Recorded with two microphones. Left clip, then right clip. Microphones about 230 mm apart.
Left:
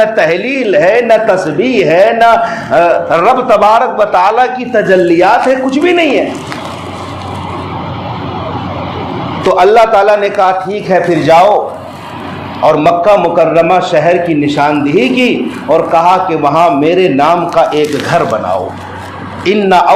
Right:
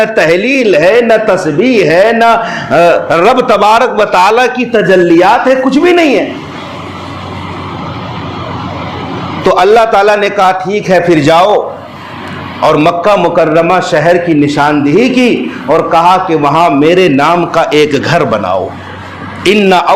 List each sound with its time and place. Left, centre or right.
0.0 s a man's voice: right
9.5 s a man's voice: right
12.6 s a man's voice: right
19.5 s a man's voice: right